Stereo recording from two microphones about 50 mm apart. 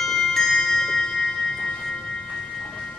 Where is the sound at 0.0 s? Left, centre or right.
Centre.